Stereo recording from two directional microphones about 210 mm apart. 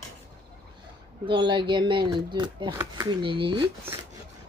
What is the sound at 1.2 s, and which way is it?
Speech, 25° right (ahead or behind).